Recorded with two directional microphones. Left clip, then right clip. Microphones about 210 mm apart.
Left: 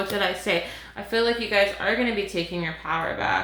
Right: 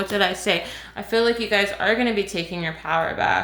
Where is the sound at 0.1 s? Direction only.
45° right (ahead or behind).